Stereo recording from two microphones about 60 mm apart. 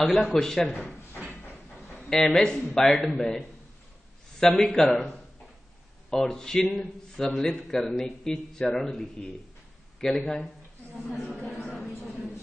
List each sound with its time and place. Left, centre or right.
0.0 s a man's voice: centre
1.2 s a sound: left
2.0 s a man's voice: centre
6.0 s a man's voice: centre